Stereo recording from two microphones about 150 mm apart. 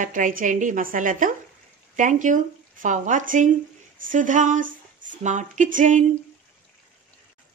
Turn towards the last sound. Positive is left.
turn(degrees=-60)  # may be behind; listen again after turning